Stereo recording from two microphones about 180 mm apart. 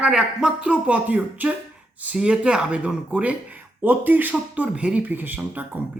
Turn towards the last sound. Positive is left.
turn(degrees=-10)  # may be behind; listen again after turning